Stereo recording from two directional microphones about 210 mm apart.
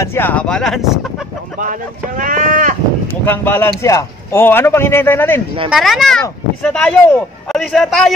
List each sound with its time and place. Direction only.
0.0 s speech: 10° left (ahead or behind)
1.6 s speech: 40° right (ahead or behind)
3.3 s a man's voice: 10° left (ahead or behind)
5.7 s speech: centre (ahead or behind)